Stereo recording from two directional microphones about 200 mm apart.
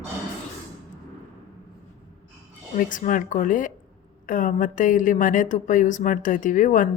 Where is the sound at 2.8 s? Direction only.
40° left (ahead or behind).